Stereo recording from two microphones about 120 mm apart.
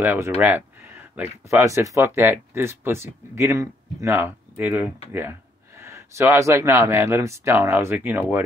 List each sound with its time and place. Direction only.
0.0 s speech: 15° right (ahead or behind)